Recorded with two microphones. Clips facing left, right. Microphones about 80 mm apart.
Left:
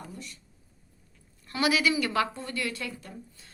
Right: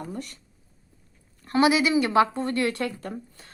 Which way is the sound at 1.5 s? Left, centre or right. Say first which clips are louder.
Right 5 dB; right.